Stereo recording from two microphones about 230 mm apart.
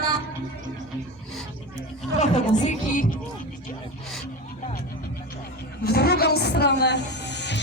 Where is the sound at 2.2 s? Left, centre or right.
Left.